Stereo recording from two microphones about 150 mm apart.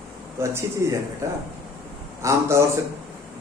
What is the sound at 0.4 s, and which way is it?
Speech, 15° right (ahead or behind).